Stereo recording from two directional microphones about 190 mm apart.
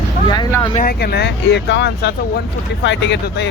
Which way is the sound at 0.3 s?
20° left (ahead or behind).